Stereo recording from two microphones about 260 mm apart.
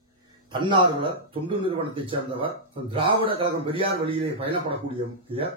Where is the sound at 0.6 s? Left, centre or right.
Centre.